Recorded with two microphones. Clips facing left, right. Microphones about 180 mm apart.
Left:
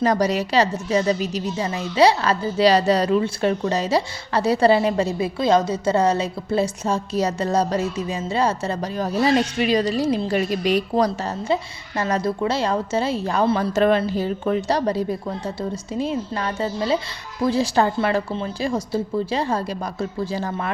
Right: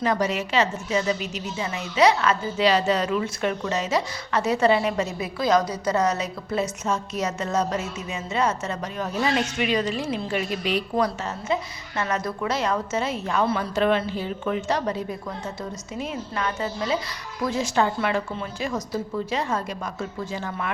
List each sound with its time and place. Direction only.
0.0 s a woman's voice: 40° left (ahead or behind)